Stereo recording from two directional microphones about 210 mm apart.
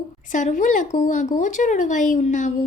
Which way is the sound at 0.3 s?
35° left (ahead or behind).